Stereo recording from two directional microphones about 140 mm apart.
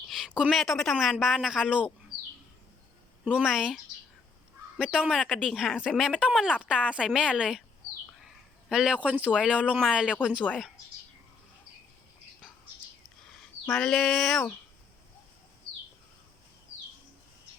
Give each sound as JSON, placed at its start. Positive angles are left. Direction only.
{"t": 0.1, "sound": "a sound", "side_deg": 0}
{"t": 0.5, "sound": "speech", "side_deg": 0}
{"t": 3.2, "sound": "speech", "side_deg": -5}
{"t": 4.8, "sound": "speech", "side_deg": -5}
{"t": 8.7, "sound": "speech", "side_deg": -5}
{"t": 13.7, "sound": "speech", "side_deg": 5}